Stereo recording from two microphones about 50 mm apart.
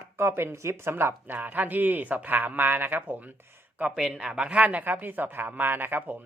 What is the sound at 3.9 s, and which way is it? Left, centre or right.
Speech, centre.